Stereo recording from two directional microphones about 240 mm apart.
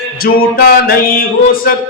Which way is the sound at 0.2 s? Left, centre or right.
Left.